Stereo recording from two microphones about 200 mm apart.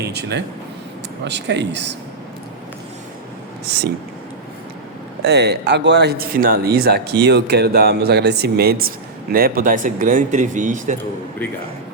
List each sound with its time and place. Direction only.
0.1 s speech: 55° right (ahead or behind)
3.7 s speech: 55° right (ahead or behind)
5.2 s speech: 55° right (ahead or behind); by 10.9 s 40° right (ahead or behind)